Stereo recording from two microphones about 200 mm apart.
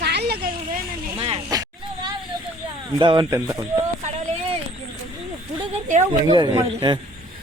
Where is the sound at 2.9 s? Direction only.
25° right (ahead or behind).